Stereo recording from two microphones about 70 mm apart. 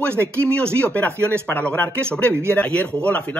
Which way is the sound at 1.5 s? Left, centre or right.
Left.